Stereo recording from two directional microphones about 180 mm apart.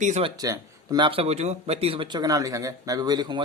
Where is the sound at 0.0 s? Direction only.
35° right (ahead or behind).